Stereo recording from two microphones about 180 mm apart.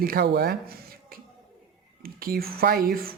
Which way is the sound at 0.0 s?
60° right (ahead or behind).